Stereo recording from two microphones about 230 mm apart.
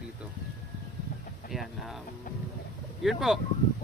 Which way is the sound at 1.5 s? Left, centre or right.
Centre.